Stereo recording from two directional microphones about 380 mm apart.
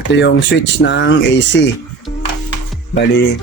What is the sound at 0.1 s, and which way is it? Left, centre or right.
Speech, left.